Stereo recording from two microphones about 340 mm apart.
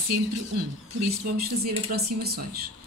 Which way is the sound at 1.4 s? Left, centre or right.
Right.